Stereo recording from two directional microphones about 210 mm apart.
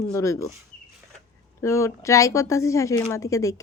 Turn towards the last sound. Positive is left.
turn(degrees=15)  # may be behind; listen again after turning